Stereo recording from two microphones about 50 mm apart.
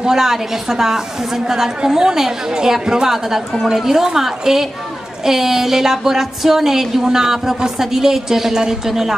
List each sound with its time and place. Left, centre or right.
0.0 s a woman's voice: centre